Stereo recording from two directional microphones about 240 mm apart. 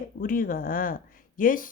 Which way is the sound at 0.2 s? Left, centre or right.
Left.